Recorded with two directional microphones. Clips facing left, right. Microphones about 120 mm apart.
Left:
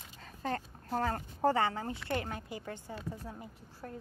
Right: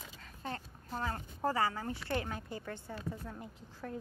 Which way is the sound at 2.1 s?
45° left (ahead or behind).